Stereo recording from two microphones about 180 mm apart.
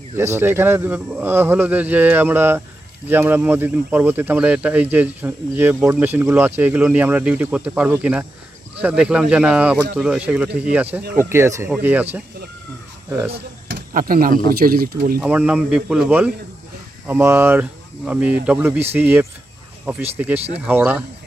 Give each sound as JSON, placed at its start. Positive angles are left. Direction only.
{"t": 0.2, "sound": "speech", "side_deg": -15}
{"t": 13.1, "sound": "speech", "side_deg": -15}
{"t": 13.9, "sound": "speech", "side_deg": -55}
{"t": 15.2, "sound": "speech", "side_deg": -5}